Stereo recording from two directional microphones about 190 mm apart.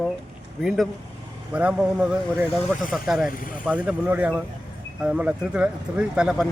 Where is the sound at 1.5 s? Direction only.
5° right (ahead or behind).